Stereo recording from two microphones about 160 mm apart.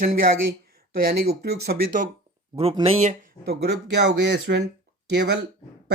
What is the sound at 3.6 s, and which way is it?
Speech, 90° right.